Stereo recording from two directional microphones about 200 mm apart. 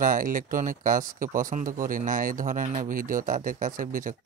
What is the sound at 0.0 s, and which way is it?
Speech, 40° right (ahead or behind).